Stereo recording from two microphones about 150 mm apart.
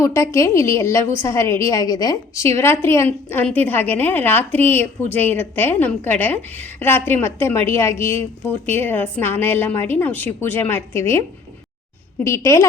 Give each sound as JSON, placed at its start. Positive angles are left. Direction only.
{"t": 0.0, "sound": "a woman's voice", "side_deg": 20}
{"t": 12.2, "sound": "a woman's voice", "side_deg": 20}